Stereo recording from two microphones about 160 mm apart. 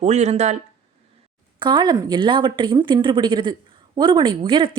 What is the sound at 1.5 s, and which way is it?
A woman's voice, 30° right (ahead or behind).